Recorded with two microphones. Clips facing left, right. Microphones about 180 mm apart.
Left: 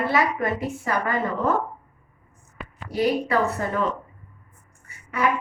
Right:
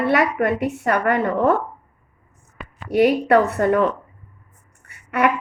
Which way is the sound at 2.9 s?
65° right (ahead or behind).